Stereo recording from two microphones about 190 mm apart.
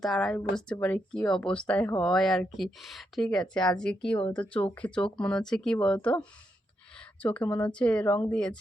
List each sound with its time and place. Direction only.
0.0 s speech: centre (ahead or behind)